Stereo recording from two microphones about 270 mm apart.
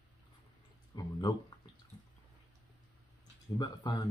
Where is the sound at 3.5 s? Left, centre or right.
Centre.